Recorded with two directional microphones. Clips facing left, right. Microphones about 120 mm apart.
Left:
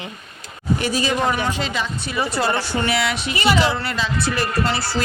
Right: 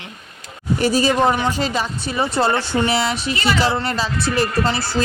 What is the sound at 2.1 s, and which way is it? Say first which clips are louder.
A woman's voice: right 3 dB; 25° right (ahead or behind).